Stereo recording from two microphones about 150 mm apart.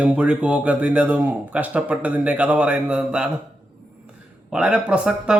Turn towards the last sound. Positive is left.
turn(degrees=-5)  # may be behind; listen again after turning